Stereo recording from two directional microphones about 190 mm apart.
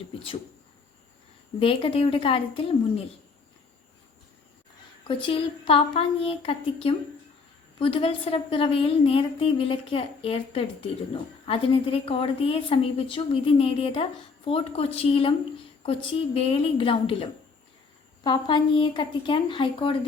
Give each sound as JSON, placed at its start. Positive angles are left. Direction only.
{"t": 1.5, "sound": "a woman's voice", "side_deg": 30}
{"t": 5.0, "sound": "a woman's voice", "side_deg": 25}